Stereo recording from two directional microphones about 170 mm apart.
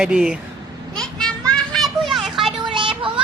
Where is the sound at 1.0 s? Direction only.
5° left (ahead or behind).